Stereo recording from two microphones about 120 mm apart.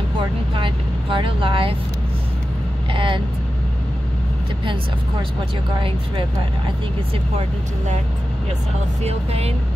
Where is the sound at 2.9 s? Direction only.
45° right (ahead or behind).